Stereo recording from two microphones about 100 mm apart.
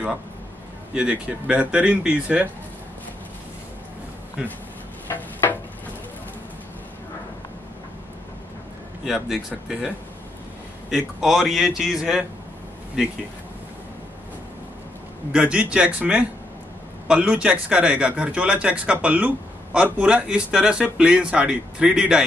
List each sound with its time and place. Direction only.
0.9 s speech: 10° right (ahead or behind)
5.1 s a sound: 20° left (ahead or behind)
9.0 s a man's voice: 5° right (ahead or behind)
15.3 s speech: 10° right (ahead or behind)